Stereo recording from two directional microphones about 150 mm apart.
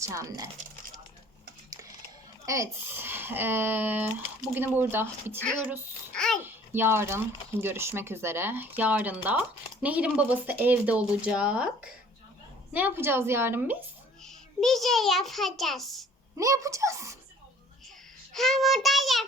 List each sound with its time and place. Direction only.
0.0 s speech: 20° right (ahead or behind)
2.5 s speech: 15° right (ahead or behind)
5.4 s child singing: 5° left (ahead or behind)
6.1 s babbling: 5° left (ahead or behind)
6.4 s speech: 15° right (ahead or behind)
14.2 s a child's voice: 5° left (ahead or behind)
16.4 s speech: 20° right (ahead or behind)
18.3 s child singing: centre (ahead or behind)